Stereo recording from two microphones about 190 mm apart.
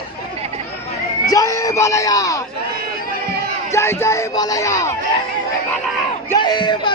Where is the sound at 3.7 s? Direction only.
15° left (ahead or behind).